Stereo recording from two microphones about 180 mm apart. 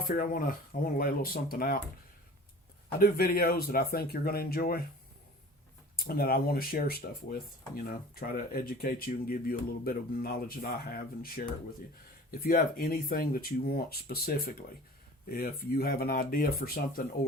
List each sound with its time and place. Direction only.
0.0 s speech: 50° left (ahead or behind)
3.0 s speech: 55° left (ahead or behind)
6.1 s speech: 55° left (ahead or behind)